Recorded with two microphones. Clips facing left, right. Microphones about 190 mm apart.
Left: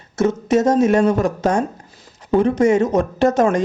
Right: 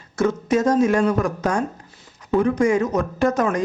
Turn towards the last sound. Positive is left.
turn(degrees=25)  # may be behind; listen again after turning